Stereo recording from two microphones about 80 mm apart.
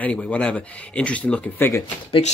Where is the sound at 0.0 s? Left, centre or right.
Centre.